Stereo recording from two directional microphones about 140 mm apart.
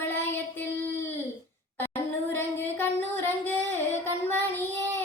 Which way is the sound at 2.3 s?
15° left (ahead or behind).